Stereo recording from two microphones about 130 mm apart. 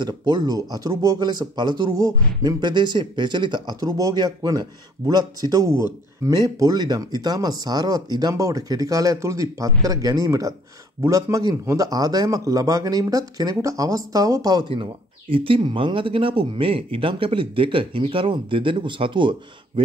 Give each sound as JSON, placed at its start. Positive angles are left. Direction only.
{"t": 0.0, "sound": "speech", "side_deg": -30}